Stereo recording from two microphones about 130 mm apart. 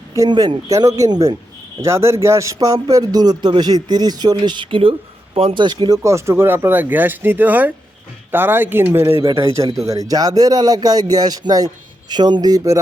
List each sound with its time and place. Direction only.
0.2 s speech: 30° right (ahead or behind)
6.0 s speech: 20° right (ahead or behind)